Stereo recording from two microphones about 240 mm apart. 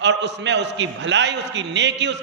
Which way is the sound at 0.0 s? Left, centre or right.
Right.